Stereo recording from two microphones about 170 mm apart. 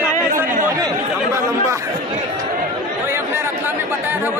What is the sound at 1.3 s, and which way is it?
Chatter, 15° right (ahead or behind).